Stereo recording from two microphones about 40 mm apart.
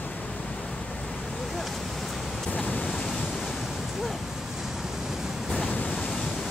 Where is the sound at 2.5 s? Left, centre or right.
Left.